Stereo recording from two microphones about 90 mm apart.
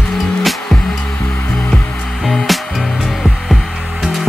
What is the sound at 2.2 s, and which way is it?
Music, centre (ahead or behind).